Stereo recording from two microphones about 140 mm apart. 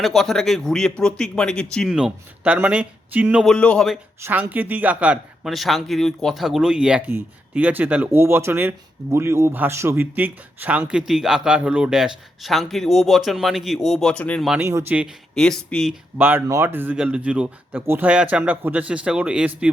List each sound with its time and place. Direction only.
0.0 s speech: centre (ahead or behind)
1.9 s speech: 5° right (ahead or behind)
3.4 s speech: 5° left (ahead or behind)
4.2 s speech: 10° right (ahead or behind); by 14.5 s 5° left (ahead or behind)
14.6 s speech: 15° right (ahead or behind)
15.0 s speech: 5° left (ahead or behind)
16.1 s speech: 10° right (ahead or behind)